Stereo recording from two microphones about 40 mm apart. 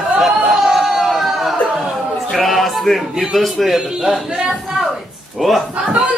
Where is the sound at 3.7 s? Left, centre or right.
Centre.